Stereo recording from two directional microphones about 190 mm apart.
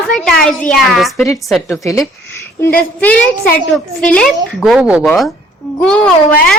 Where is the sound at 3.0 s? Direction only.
5° left (ahead or behind).